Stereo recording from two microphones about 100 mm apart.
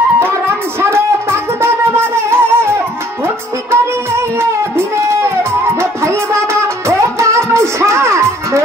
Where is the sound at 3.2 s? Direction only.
25° right (ahead or behind).